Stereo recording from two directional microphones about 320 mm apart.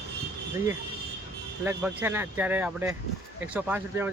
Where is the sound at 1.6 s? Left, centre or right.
Centre.